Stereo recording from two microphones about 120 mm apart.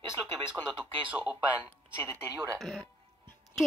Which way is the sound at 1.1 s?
10° right (ahead or behind).